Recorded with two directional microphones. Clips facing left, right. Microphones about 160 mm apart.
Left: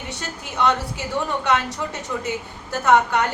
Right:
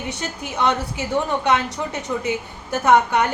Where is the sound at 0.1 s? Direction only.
20° right (ahead or behind).